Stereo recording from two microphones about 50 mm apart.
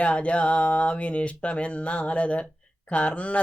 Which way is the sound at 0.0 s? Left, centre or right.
Left.